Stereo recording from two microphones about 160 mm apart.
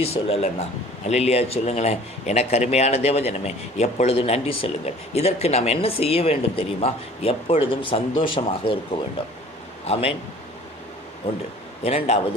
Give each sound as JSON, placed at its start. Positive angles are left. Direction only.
{"t": 0.0, "sound": "a man's voice", "side_deg": 40}
{"t": 11.8, "sound": "a man's voice", "side_deg": 40}